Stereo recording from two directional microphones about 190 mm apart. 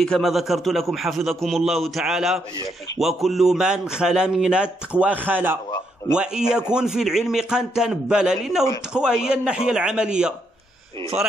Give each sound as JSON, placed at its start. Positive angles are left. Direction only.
{"t": 0.0, "sound": "a man's voice", "side_deg": 0}